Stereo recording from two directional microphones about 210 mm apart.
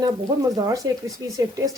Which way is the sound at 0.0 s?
15° right (ahead or behind).